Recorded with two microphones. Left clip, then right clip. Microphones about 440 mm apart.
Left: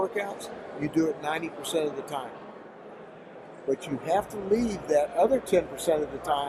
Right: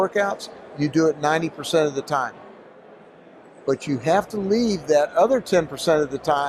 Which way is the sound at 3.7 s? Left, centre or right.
Right.